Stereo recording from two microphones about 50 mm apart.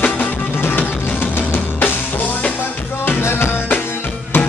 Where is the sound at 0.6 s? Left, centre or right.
Left.